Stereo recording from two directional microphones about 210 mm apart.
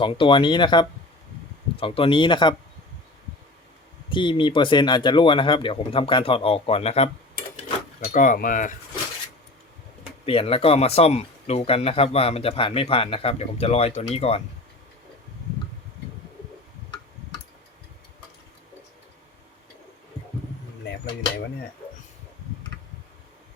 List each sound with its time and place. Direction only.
0.0 s speech: 25° left (ahead or behind)
4.1 s speech: 25° left (ahead or behind); by 8.7 s 40° left (ahead or behind)
10.2 s speech: 25° left (ahead or behind)